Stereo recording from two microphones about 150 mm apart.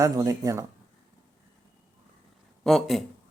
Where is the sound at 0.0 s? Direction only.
25° right (ahead or behind).